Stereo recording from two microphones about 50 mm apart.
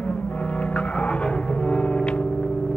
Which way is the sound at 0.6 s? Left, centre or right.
Centre.